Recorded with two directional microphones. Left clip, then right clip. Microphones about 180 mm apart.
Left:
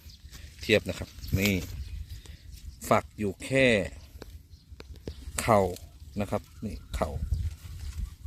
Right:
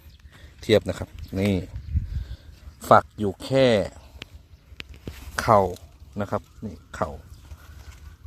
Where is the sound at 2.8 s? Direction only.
20° right (ahead or behind).